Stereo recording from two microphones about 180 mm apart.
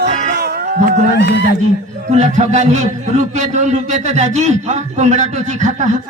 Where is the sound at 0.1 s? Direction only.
40° right (ahead or behind).